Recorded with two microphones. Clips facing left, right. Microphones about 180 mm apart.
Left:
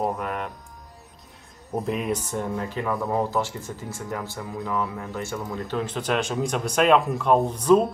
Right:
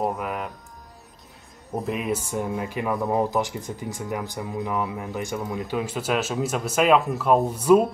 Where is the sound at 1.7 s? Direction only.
Centre (ahead or behind).